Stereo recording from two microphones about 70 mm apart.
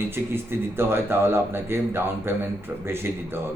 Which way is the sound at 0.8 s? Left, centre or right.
Right.